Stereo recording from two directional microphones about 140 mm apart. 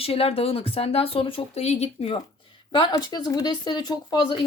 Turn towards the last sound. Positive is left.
turn(degrees=35)  # may be behind; listen again after turning